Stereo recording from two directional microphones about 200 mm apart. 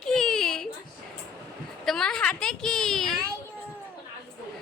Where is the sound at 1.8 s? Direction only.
Centre (ahead or behind).